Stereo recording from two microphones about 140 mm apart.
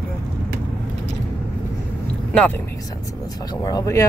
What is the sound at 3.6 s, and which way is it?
Speech, 25° left (ahead or behind).